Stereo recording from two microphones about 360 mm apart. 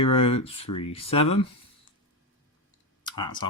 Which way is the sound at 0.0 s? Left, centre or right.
Centre.